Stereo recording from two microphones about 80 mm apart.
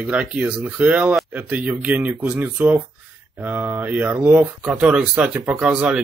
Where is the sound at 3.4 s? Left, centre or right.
Right.